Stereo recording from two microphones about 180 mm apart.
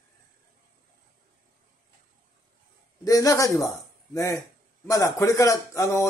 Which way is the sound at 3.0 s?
20° left (ahead or behind).